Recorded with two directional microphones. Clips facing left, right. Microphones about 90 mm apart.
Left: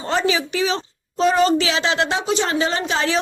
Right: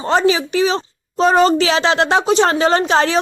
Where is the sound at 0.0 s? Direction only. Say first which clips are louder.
Right 5 dB; 35° right (ahead or behind).